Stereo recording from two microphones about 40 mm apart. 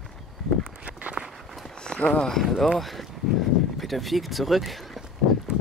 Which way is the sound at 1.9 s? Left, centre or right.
Left.